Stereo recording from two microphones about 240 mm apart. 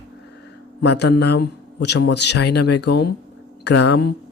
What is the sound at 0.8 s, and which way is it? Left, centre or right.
A man's voice, left.